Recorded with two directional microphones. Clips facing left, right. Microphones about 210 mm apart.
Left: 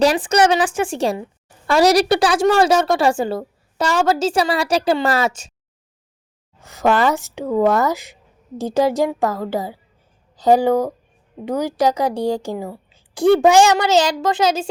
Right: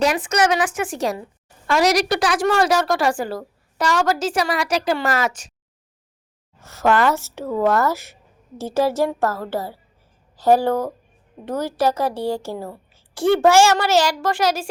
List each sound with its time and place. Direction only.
0.0 s a woman's voice: 30° left (ahead or behind)
6.6 s a woman's voice: 15° left (ahead or behind)